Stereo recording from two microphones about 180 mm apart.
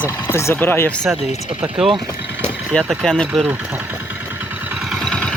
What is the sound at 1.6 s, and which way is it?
Speech, 5° right (ahead or behind).